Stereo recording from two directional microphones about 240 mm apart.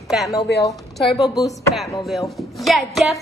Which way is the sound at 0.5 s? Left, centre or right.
Left.